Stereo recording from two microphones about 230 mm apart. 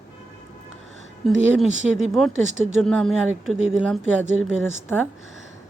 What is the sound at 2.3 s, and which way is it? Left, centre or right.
Speech, right.